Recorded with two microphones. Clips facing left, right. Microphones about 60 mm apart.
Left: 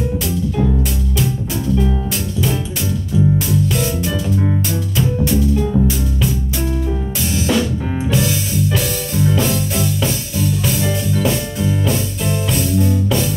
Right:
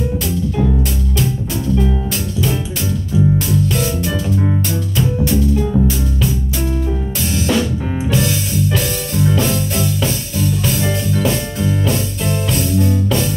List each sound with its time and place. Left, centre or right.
0.6 s music: centre
3.3 s music: centre
7.2 s drum kit: centre
8.1 s music: centre